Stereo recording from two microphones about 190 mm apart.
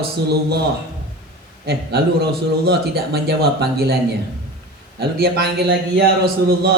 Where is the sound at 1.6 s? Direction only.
55° right (ahead or behind).